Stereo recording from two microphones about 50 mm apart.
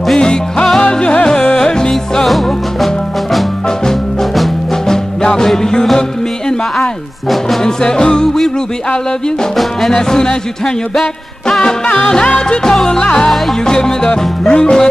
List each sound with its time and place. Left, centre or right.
0.2 s music: centre
2.2 s music: centre
9.6 s music: centre
11.6 s music: centre
12.7 s music: centre